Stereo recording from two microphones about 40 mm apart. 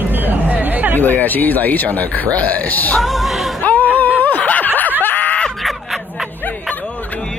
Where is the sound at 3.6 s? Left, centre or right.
Left.